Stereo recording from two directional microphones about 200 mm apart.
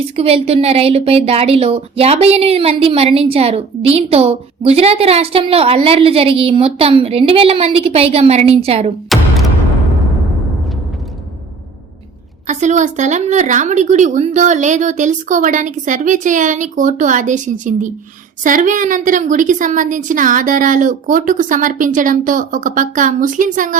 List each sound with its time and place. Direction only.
0.2 s a woman's voice: 30° right (ahead or behind)
9.0 s a sound: centre (ahead or behind)
12.5 s a woman's voice: 35° right (ahead or behind)